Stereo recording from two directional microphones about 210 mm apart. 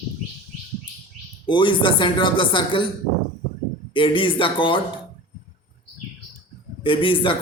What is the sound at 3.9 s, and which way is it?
Speech, 25° left (ahead or behind).